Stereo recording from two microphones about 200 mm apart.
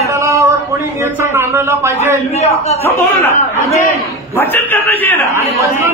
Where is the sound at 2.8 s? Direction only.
10° left (ahead or behind).